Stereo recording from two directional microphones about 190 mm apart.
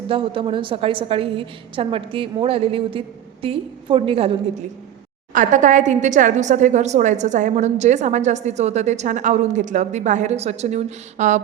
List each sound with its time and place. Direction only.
0.1 s a woman's voice: 25° right (ahead or behind)
5.3 s a woman's voice: 40° right (ahead or behind)